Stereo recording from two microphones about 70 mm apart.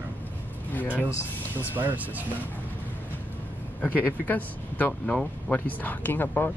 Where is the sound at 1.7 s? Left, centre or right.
Right.